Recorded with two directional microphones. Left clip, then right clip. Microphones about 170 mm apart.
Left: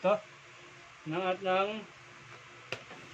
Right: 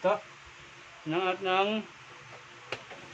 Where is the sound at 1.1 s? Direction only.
50° right (ahead or behind).